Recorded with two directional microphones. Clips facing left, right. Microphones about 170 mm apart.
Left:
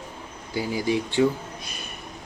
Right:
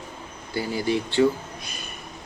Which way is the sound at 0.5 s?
15° left (ahead or behind).